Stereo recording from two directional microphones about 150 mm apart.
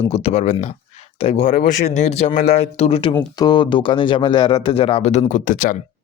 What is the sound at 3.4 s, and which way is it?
Speech, 30° left (ahead or behind).